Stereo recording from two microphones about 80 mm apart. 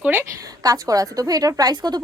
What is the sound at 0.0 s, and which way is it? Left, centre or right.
Speech, centre.